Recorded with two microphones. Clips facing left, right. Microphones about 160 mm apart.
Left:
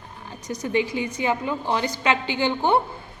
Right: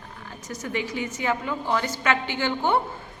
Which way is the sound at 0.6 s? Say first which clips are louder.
Left 5 dB; 15° left (ahead or behind).